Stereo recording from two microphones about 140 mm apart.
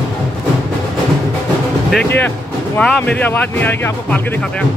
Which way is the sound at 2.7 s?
10° left (ahead or behind).